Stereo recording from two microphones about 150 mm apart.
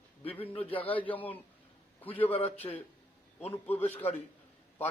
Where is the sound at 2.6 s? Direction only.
20° left (ahead or behind).